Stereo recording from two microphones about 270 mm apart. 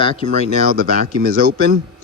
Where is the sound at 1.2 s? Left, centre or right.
Right.